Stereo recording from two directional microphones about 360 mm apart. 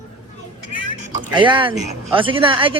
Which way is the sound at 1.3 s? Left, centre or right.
Centre.